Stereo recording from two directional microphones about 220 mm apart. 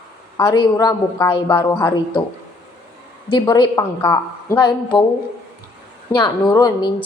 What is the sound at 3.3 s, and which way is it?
A woman's voice, 20° left (ahead or behind).